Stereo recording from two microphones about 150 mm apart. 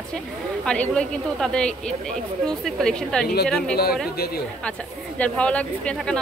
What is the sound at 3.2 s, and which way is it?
Speech, 90° left.